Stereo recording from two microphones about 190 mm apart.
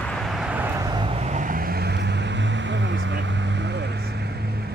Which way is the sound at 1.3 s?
45° right (ahead or behind).